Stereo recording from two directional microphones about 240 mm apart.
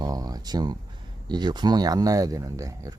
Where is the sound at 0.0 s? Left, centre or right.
Centre.